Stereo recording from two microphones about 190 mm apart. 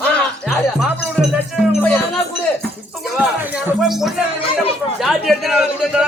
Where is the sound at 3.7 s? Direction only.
Centre (ahead or behind).